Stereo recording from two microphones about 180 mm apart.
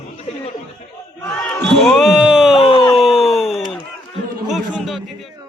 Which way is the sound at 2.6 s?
30° left (ahead or behind).